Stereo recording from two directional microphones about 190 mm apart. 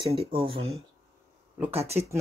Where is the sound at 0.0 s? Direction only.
30° right (ahead or behind).